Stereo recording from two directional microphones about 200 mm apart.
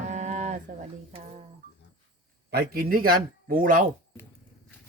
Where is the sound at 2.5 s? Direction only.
50° right (ahead or behind).